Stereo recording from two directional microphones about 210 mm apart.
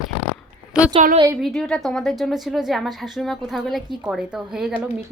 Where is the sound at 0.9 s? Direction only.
25° right (ahead or behind).